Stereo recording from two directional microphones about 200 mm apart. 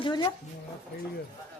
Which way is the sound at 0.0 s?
20° left (ahead or behind).